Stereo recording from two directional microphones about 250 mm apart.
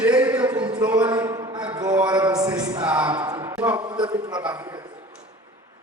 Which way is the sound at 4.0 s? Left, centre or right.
Centre.